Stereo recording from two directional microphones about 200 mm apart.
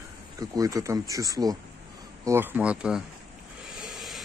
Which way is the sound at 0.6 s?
15° right (ahead or behind).